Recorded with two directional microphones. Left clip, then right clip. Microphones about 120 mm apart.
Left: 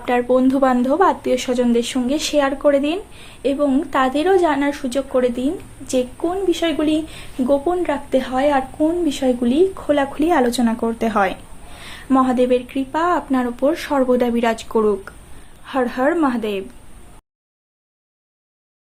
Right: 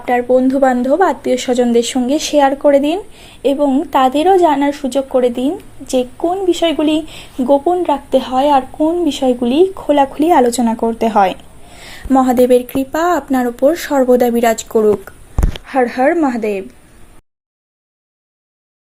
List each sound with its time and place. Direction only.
0.0 s speech: 15° right (ahead or behind)
1.5 s speech: 45° right (ahead or behind)
10.8 s a sound: 35° right (ahead or behind)
12.2 s speech: 55° right (ahead or behind)
16.4 s a woman's voice: 15° right (ahead or behind)